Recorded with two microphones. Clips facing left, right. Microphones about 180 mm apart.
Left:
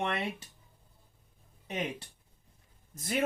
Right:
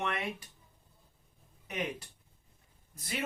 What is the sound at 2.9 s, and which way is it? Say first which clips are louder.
Speech: left 6 dB; 50° left (ahead or behind).